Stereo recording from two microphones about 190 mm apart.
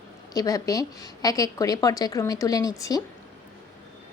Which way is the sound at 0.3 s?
15° left (ahead or behind).